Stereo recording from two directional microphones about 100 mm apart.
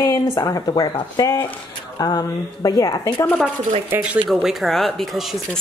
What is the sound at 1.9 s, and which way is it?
A woman's voice, 40° left (ahead or behind).